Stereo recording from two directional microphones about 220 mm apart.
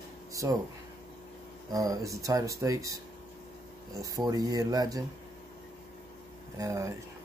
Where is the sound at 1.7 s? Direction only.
15° right (ahead or behind).